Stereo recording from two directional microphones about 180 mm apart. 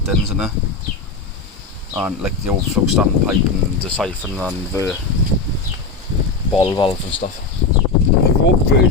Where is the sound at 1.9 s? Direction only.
5° right (ahead or behind).